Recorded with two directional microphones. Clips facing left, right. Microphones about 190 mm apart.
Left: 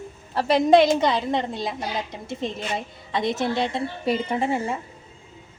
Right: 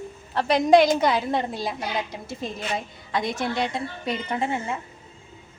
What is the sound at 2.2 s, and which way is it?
Speech, 20° left (ahead or behind).